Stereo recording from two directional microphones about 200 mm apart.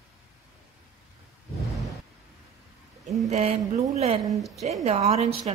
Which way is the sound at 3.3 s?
35° right (ahead or behind).